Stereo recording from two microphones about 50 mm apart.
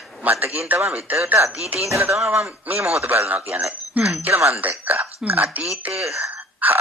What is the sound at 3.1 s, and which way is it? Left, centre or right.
Speech, right.